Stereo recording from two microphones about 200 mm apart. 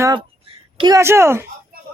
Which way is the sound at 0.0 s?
20° right (ahead or behind).